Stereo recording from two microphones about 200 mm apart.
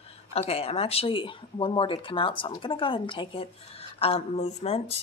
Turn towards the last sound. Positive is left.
turn(degrees=30)  # may be behind; listen again after turning